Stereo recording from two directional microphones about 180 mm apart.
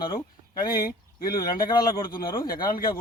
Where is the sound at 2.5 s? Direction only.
55° left (ahead or behind).